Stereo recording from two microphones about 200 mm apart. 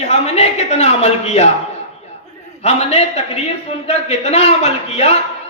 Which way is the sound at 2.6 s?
30° left (ahead or behind).